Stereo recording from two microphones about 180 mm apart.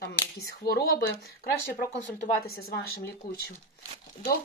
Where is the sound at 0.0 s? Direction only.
60° left (ahead or behind).